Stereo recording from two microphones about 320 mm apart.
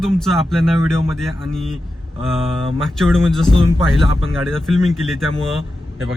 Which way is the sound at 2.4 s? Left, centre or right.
Centre.